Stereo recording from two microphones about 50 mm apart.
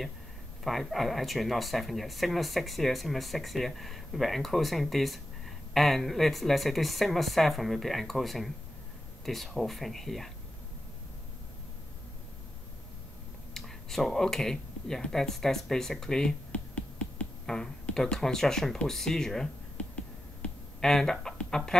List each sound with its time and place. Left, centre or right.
0.7 s speech: centre
13.5 s speech: centre
16.5 s finger snapping: left
18.1 s speech: centre
20.8 s speech: centre